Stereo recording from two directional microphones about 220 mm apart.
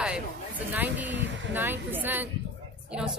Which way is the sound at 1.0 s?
55° right (ahead or behind).